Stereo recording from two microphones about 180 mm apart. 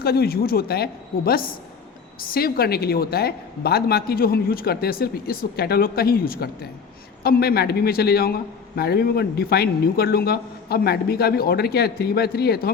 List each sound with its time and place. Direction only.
0.0 s a man's voice: 60° left (ahead or behind)